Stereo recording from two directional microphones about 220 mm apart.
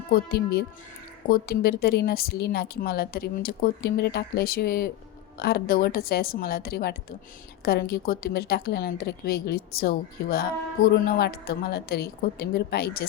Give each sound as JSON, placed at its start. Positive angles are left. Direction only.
{"t": 0.1, "sound": "speech", "side_deg": 45}